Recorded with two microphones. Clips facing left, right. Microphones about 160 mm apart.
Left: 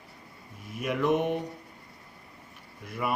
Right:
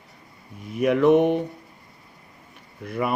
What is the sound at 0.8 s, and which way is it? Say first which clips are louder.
Speech: right 9 dB; 60° right (ahead or behind).